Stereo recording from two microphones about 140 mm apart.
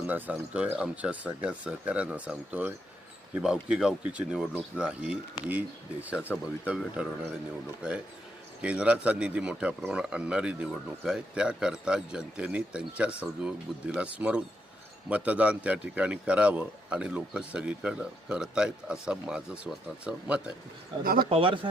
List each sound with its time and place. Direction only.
0.1 s a man's voice: 10° right (ahead or behind)
21.0 s speech: 90° right
21.2 s speech: 40° right (ahead or behind)